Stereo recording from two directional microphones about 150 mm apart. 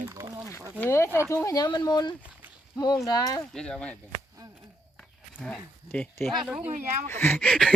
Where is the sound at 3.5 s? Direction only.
5° left (ahead or behind).